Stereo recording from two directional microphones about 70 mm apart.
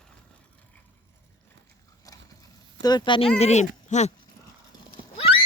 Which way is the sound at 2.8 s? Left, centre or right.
Left.